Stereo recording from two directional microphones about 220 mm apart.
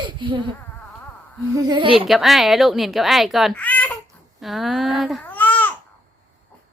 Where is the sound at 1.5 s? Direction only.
20° right (ahead or behind).